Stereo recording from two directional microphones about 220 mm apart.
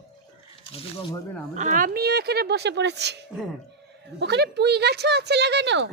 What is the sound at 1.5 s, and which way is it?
Speech, 35° right (ahead or behind).